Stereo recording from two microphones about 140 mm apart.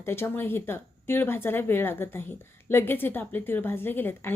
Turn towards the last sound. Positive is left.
turn(degrees=15)  # may be behind; listen again after turning